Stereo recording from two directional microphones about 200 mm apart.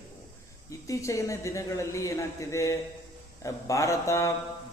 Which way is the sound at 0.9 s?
15° left (ahead or behind).